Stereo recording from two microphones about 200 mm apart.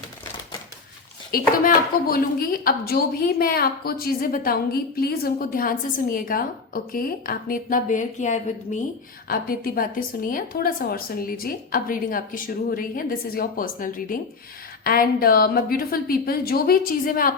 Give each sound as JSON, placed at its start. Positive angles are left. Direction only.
{"t": 1.3, "sound": "a woman's voice", "side_deg": 45}